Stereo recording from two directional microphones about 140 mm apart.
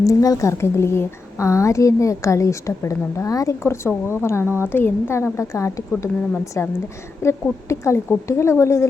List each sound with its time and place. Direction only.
0.0 s a woman's voice: 25° left (ahead or behind)